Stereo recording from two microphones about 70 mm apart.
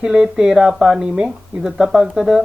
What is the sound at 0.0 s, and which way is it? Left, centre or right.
Speech, centre.